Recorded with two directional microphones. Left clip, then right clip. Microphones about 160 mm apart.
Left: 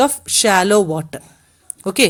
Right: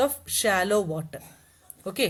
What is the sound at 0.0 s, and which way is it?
A woman's voice, 30° left (ahead or behind).